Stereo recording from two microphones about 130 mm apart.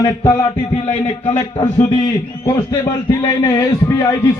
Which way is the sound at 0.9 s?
55° left (ahead or behind).